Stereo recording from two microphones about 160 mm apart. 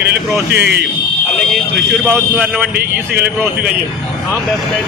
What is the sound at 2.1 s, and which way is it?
Speech, 15° right (ahead or behind).